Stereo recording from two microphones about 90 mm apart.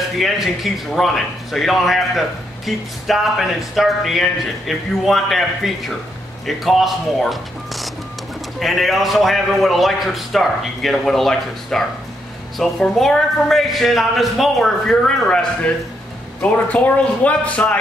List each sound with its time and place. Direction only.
0.2 s speech: centre (ahead or behind); by 17.7 s 15° left (ahead or behind)